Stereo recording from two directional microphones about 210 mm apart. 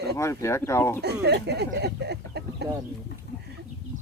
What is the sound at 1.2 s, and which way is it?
Speech, 50° right (ahead or behind).